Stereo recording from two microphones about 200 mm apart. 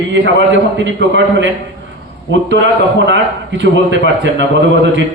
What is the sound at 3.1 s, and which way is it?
A man's voice, 60° right (ahead or behind).